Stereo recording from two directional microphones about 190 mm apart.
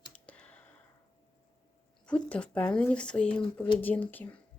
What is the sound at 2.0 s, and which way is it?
Speech, 5° left (ahead or behind).